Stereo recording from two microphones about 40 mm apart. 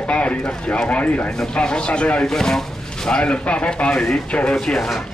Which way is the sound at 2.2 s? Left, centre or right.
Centre.